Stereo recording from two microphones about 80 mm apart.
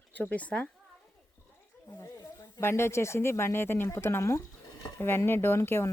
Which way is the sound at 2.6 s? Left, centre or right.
Left.